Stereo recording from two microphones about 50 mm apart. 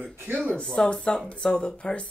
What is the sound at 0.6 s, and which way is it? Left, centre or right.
Speech, centre.